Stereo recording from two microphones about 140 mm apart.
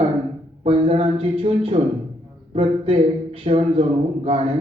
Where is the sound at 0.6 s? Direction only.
45° right (ahead or behind).